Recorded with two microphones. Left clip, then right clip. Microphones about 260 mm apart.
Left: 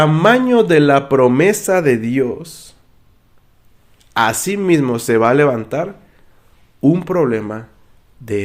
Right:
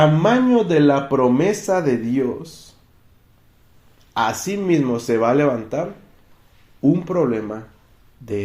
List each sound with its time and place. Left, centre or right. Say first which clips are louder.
0.0 s speech: left 4 dB; left
4.1 s speech: left 5 dB; left